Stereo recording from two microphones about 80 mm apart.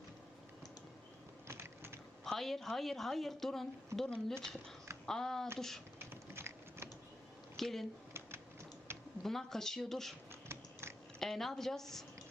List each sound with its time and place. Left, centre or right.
1.5 s a sound: right
2.2 s a woman's voice: centre
6.0 s typing: right
7.5 s speech: centre
9.2 s a woman's voice: centre
10.5 s biting: right
11.2 s a woman's voice: centre